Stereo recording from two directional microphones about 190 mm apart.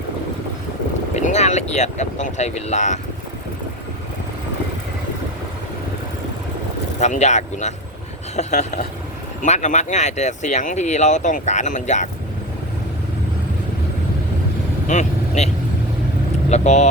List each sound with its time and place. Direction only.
1.1 s speech: 35° left (ahead or behind)
7.0 s speech: 35° left (ahead or behind)
14.8 s vehicle: 40° left (ahead or behind)
16.5 s speech: 40° left (ahead or behind)